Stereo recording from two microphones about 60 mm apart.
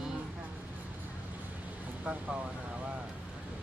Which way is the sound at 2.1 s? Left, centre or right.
Centre.